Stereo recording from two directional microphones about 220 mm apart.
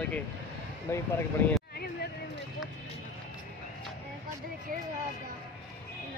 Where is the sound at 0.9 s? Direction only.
10° left (ahead or behind).